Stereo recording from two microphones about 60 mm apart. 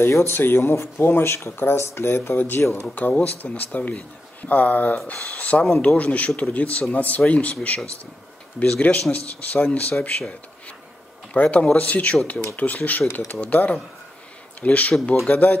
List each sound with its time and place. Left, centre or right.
0.1 s speech: left
1.8 s speech: left
2.0 s speech: left
2.9 s speech: left
11.3 s speech: left